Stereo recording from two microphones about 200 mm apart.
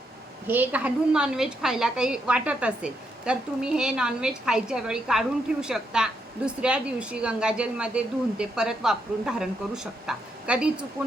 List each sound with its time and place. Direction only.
0.4 s a woman's voice: 10° right (ahead or behind)